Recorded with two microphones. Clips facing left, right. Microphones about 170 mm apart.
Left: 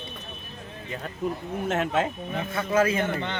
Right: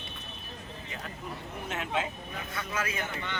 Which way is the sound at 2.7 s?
30° left (ahead or behind).